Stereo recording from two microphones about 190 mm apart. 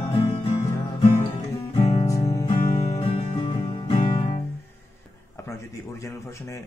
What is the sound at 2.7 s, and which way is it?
Music, 35° left (ahead or behind).